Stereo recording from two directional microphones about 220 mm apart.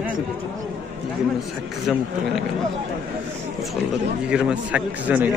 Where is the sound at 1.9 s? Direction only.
Centre (ahead or behind).